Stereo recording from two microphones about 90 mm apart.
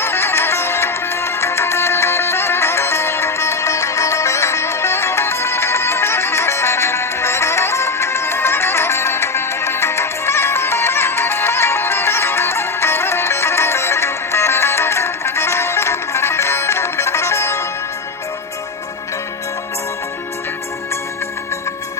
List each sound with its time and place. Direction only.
0.0 s music: 25° left (ahead or behind)